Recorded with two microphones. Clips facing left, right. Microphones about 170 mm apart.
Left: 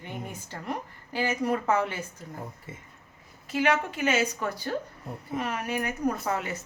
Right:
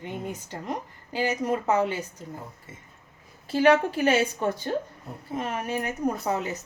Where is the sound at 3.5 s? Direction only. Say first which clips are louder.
Right 6 dB; 30° right (ahead or behind).